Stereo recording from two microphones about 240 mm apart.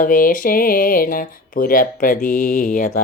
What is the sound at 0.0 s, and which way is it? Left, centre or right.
Speech, left.